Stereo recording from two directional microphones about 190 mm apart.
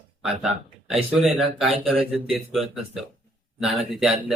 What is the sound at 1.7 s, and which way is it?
Speech, 30° right (ahead or behind).